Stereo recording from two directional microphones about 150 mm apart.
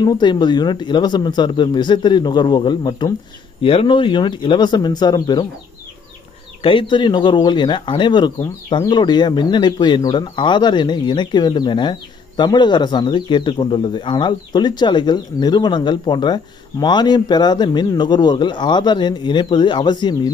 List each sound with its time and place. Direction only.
0.0 s speech: 30° left (ahead or behind)
6.6 s speech: 35° left (ahead or behind)